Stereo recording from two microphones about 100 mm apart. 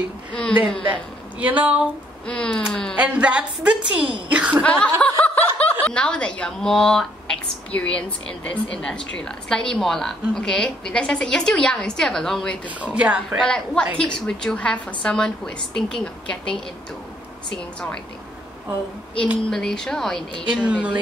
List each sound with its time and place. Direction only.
0.3 s speech: 10° left (ahead or behind)
1.4 s a woman's voice: 15° right (ahead or behind)
2.2 s speech: 10° left (ahead or behind)
3.0 s a woman's voice: 15° right (ahead or behind)
4.6 s speech: 15° left (ahead or behind)
12.6 s a woman's voice: 15° right (ahead or behind)
13.4 s speech: 10° left (ahead or behind)
19.5 s speech: 5° left (ahead or behind)
20.6 s a woman's voice: 15° right (ahead or behind)